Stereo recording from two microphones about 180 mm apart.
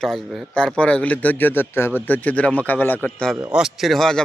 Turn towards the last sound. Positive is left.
turn(degrees=0)  # may be behind; listen again after turning